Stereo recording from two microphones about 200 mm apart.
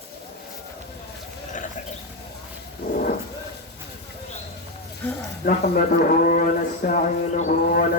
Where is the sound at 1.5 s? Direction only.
40° left (ahead or behind).